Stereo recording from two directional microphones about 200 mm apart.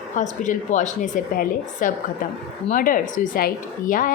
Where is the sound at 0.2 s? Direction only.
40° left (ahead or behind).